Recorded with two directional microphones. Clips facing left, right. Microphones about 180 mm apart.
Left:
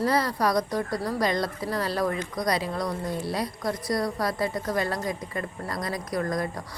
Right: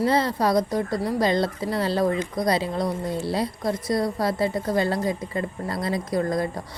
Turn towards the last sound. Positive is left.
turn(degrees=-25)  # may be behind; listen again after turning